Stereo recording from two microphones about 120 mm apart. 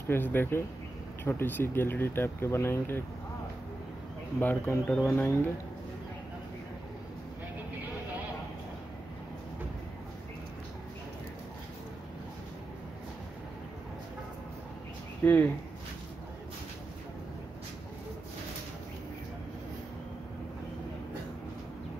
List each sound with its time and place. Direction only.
0.1 s speech: 15° left (ahead or behind)
4.4 s speech: 15° left (ahead or behind)
15.2 s speech: 15° left (ahead or behind)